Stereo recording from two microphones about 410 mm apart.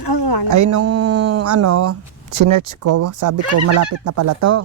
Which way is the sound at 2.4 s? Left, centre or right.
Right.